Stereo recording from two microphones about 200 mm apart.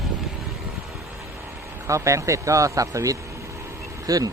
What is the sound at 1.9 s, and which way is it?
Speech, 15° right (ahead or behind).